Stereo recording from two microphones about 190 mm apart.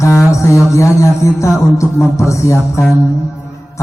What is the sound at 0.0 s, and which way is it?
A man's voice, 15° left (ahead or behind).